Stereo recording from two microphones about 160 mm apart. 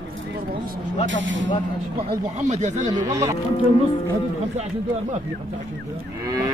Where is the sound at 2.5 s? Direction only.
50° right (ahead or behind).